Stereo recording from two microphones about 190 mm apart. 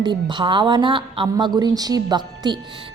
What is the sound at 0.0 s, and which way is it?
A woman's voice, 25° right (ahead or behind).